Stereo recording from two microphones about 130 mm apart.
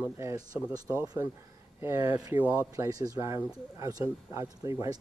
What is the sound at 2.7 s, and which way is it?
Speech, 25° right (ahead or behind).